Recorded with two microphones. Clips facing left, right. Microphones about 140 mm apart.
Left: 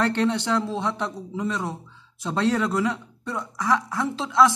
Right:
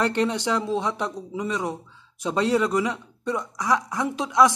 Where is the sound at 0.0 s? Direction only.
15° right (ahead or behind).